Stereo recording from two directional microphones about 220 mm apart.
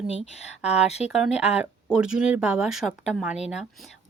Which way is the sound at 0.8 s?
30° left (ahead or behind).